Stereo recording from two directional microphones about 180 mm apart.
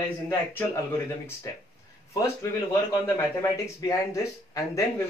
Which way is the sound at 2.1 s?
20° left (ahead or behind).